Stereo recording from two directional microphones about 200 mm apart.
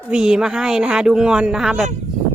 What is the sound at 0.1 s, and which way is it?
Speech, 5° right (ahead or behind).